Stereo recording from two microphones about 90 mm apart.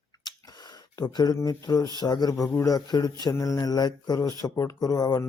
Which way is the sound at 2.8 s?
50° left (ahead or behind).